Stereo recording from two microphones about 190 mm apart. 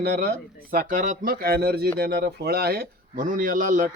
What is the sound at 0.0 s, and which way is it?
Speech, 55° right (ahead or behind).